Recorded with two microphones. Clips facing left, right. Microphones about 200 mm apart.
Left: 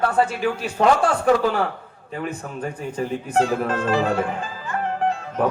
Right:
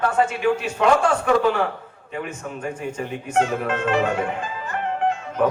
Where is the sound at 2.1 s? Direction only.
35° left (ahead or behind).